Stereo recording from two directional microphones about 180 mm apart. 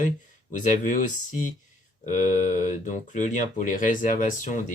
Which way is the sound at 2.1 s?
45° left (ahead or behind).